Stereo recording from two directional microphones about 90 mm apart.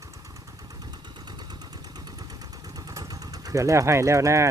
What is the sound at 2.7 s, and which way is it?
Vehicle, 40° right (ahead or behind).